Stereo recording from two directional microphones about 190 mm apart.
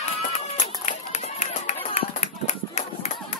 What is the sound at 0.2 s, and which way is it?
Run, 40° left (ahead or behind).